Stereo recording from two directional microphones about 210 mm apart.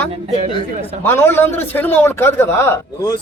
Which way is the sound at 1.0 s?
10° left (ahead or behind).